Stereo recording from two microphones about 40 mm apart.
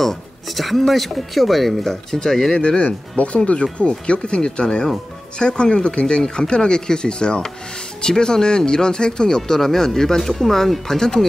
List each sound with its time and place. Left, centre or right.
0.0 s speech: centre
2.5 s speech: left